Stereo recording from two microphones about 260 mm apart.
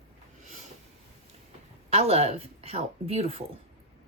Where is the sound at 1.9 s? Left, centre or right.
Right.